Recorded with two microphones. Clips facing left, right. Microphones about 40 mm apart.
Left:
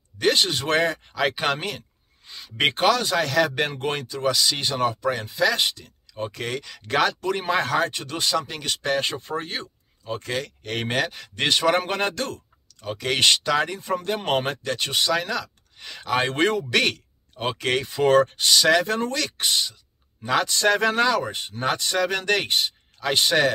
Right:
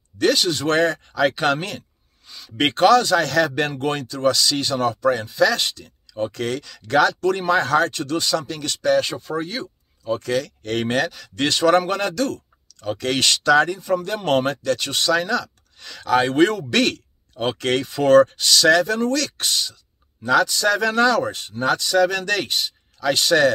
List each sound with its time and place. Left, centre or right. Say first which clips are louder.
0.3 s speech: even; left
0.7 s speech: right 3 dB; centre
2.2 s a sound: even; left
2.5 s speech: right 5 dB; centre
8.8 s speech: right 7 dB; left
10.2 s speech: right 6 dB; centre
11.1 s speech: right 1 dB; left
12.8 s speech: even; centre; by 14.0 s left
14.0 s speech: right 2 dB; centre
18.9 s speech: right 4 dB; left
19.1 s speech: right 2 dB; centre
20.3 s speech: right 2 dB; left
20.9 s speech: right 4 dB; centre; by 21.9 s left
21.9 s speech: right 4 dB; centre